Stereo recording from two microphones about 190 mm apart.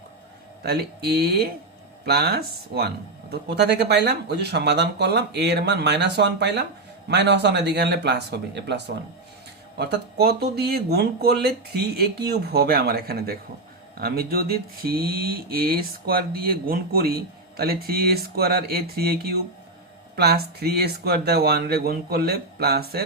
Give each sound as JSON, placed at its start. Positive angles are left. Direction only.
{"t": 0.6, "sound": "speech", "side_deg": -55}